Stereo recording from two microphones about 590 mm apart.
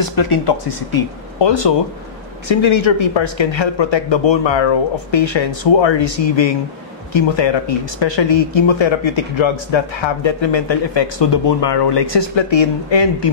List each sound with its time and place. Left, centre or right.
0.0 s speech: left